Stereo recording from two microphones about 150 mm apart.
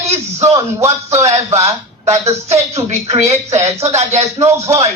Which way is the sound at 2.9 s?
45° right (ahead or behind).